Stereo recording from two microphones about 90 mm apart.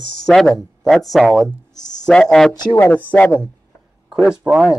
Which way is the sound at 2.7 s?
20° left (ahead or behind).